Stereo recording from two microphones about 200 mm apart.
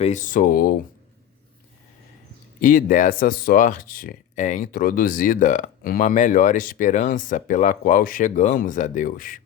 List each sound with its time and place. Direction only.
0.0 s speech: 40° left (ahead or behind)
2.6 s speech: 40° left (ahead or behind)